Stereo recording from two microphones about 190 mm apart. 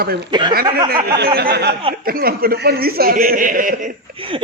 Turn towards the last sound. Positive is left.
turn(degrees=-45)  # may be behind; listen again after turning